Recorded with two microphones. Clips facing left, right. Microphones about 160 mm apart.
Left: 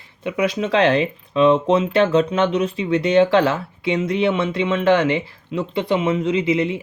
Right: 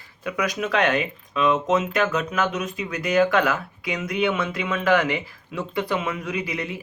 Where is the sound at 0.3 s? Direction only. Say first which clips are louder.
Left 5 dB; 25° left (ahead or behind).